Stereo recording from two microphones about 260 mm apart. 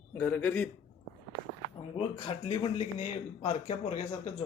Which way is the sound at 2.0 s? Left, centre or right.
Left.